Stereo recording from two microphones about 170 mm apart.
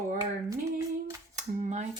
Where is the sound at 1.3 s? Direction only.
45° right (ahead or behind).